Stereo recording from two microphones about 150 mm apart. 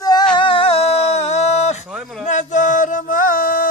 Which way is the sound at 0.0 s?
25° left (ahead or behind).